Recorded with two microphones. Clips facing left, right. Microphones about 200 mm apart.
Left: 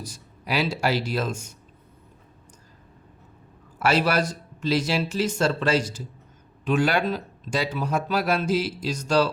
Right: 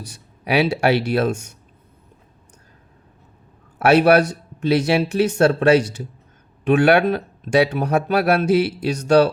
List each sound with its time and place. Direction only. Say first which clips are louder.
0.0 s speech: right 4 dB; 65° right (ahead or behind)
3.8 s speech: right 9 dB; 65° right (ahead or behind)